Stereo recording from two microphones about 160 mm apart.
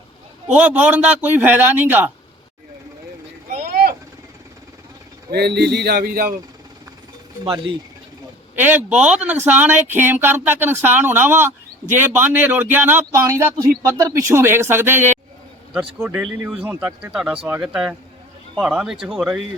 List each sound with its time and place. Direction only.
0.4 s speech: 10° right (ahead or behind)
3.5 s vehicle: 60° right (ahead or behind)
5.3 s speech: 90° right; by 6.3 s 65° right (ahead or behind)
7.4 s speech: 35° right (ahead or behind)
8.5 s speech: 10° right (ahead or behind)